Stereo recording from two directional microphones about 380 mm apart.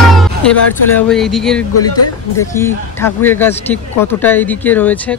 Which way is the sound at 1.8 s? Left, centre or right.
Left.